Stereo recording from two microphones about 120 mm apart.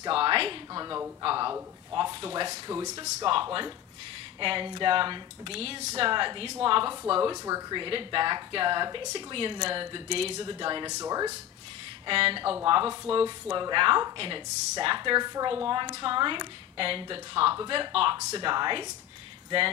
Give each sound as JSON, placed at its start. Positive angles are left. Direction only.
{"t": 0.1, "sound": "a woman's voice", "side_deg": -45}
{"t": 2.5, "sound": "speech", "side_deg": -30}
{"t": 4.4, "sound": "speech", "side_deg": -45}
{"t": 7.2, "sound": "a woman's voice", "side_deg": -30}
{"t": 7.8, "sound": "speech", "side_deg": -45}
{"t": 11.0, "sound": "speech", "side_deg": -30}
{"t": 12.1, "sound": "a woman's voice", "side_deg": -50}